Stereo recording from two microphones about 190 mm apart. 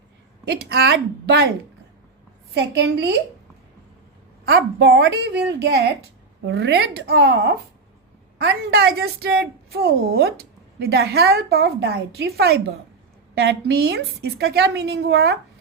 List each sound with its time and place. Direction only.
0.4 s a woman's voice: 60° right (ahead or behind)
2.6 s a woman's voice: 60° right (ahead or behind)
4.4 s a woman's voice: 60° right (ahead or behind)